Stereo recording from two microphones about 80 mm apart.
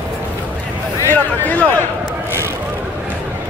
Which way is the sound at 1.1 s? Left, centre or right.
Left.